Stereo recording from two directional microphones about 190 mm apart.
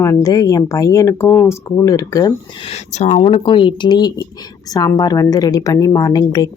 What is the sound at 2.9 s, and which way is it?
A woman's voice, 35° left (ahead or behind).